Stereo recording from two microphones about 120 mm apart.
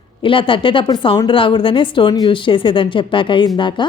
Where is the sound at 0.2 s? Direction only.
45° left (ahead or behind).